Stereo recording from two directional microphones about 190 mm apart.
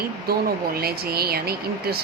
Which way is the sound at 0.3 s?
55° right (ahead or behind).